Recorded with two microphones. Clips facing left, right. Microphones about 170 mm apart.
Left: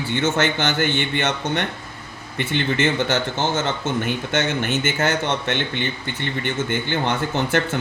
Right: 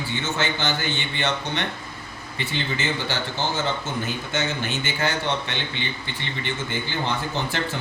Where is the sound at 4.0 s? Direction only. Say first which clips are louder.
Left 5 dB; 55° left (ahead or behind).